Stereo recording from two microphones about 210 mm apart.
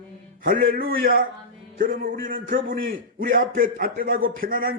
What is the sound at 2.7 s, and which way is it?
A man's voice, 45° right (ahead or behind).